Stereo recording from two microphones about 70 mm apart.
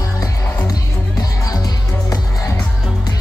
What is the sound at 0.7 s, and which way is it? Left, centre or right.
Music, left.